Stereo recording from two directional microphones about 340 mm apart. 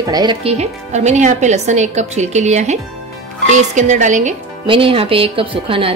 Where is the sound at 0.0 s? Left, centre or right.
Centre.